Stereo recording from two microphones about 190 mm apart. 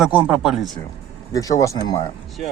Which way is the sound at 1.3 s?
20° left (ahead or behind).